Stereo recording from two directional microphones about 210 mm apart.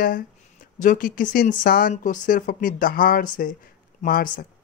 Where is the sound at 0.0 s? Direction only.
40° left (ahead or behind).